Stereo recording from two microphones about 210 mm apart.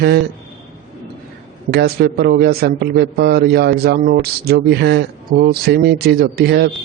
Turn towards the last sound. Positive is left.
turn(degrees=-50)  # may be behind; listen again after turning